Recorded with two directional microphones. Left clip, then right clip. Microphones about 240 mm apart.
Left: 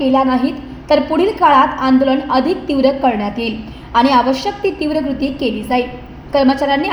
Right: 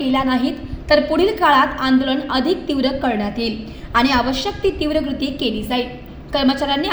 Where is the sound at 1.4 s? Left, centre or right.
Right.